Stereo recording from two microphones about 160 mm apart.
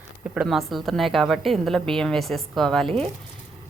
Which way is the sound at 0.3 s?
Centre (ahead or behind).